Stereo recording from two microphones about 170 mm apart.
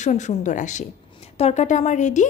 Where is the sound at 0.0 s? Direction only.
45° left (ahead or behind).